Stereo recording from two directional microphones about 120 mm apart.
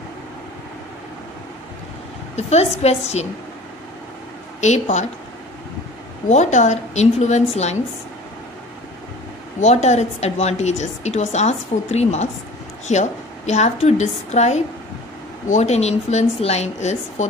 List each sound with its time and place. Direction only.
2.3 s a woman's voice: 65° left (ahead or behind)
4.6 s a woman's voice: 75° left (ahead or behind)
6.2 s a woman's voice: 75° left (ahead or behind)
9.6 s a woman's voice: 70° left (ahead or behind)